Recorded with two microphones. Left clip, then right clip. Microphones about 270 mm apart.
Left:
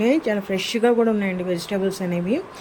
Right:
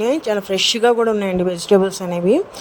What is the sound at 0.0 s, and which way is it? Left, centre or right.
Speech, right.